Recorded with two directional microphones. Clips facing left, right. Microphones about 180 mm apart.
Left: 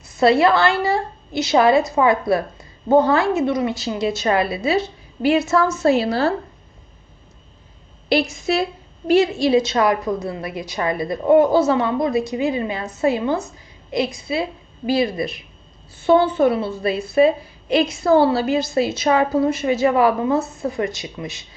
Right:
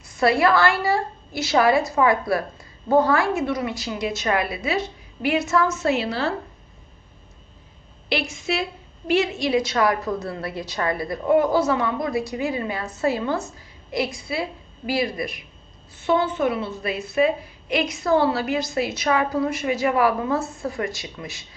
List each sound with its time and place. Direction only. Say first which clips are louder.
0.2 s a woman's voice: left 3 dB; 25° left (ahead or behind)
8.1 s a woman's voice: left 6 dB; 40° left (ahead or behind); by 21.4 s 20° left (ahead or behind)